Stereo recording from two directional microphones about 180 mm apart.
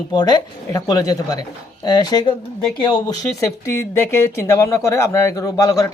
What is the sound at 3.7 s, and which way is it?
Speech, 15° left (ahead or behind).